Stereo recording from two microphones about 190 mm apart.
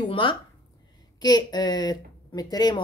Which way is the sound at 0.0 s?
25° left (ahead or behind).